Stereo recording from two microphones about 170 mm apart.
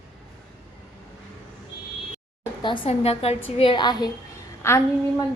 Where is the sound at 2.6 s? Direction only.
30° left (ahead or behind).